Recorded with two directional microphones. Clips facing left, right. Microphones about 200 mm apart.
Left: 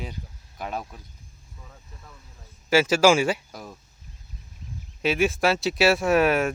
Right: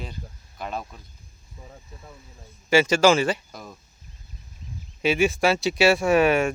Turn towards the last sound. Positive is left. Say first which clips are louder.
# right 1 dB
turn(degrees=0)  # may be behind; listen again after turning